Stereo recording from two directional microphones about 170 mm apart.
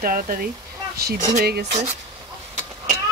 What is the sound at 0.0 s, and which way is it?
Speech, 60° right (ahead or behind).